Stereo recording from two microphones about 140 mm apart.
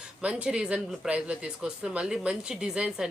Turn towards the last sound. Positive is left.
turn(degrees=-5)  # may be behind; listen again after turning